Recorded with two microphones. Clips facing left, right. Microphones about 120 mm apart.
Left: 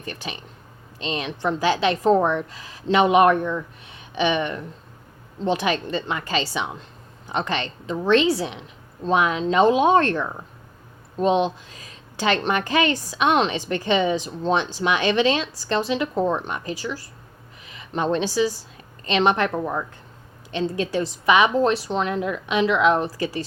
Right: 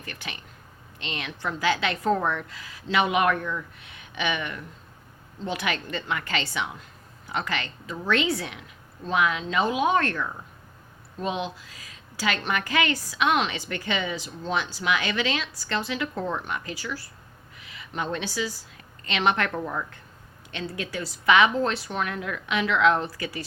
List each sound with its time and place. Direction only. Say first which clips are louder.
0.0 s a woman's voice: left 6 dB; 30° left (ahead or behind)
2.8 s a woman's voice: left 7 dB; 35° left (ahead or behind)
23.0 s speech: left 7 dB; 35° left (ahead or behind)